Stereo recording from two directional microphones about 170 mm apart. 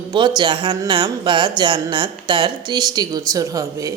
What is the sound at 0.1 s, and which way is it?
A woman's voice, 25° right (ahead or behind).